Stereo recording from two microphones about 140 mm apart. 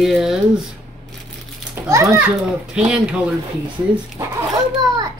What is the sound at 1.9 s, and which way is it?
Speech, 25° right (ahead or behind).